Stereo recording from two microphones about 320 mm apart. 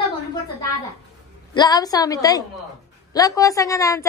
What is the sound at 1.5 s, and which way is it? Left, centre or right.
A woman's voice, centre.